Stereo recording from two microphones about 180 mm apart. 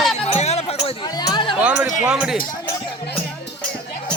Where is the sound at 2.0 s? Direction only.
5° right (ahead or behind).